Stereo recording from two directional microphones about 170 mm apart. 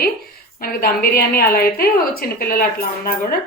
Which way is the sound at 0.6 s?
60° left (ahead or behind).